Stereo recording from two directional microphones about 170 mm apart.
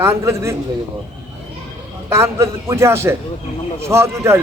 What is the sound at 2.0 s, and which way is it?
A man's voice, 15° right (ahead or behind).